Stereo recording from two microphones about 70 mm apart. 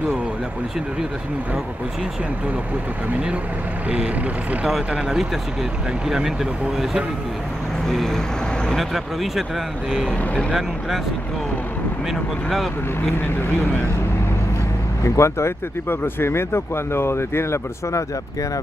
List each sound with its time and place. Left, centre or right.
3.9 s speech: centre
12.1 s speech: centre
15.0 s speech: left